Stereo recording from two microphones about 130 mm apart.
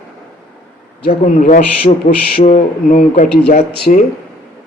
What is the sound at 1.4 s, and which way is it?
Speech, 90° left.